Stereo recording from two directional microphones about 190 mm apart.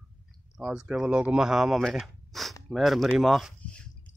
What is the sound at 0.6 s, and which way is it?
Speech, 5° right (ahead or behind).